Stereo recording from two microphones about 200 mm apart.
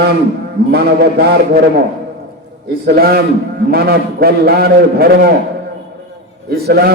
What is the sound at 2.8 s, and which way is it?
A man's voice, 50° right (ahead or behind).